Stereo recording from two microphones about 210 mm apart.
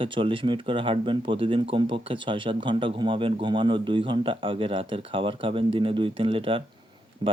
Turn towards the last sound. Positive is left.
turn(degrees=-25)  # may be behind; listen again after turning